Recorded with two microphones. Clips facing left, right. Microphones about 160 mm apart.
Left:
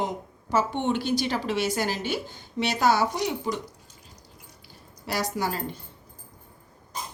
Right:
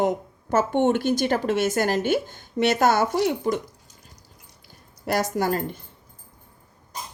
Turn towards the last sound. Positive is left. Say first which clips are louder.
# right 5 dB
turn(degrees=-50)  # may be behind; listen again after turning